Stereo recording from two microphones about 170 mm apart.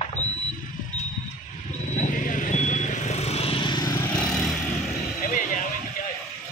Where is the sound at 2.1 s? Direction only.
50° left (ahead or behind); by 4.1 s 20° left (ahead or behind).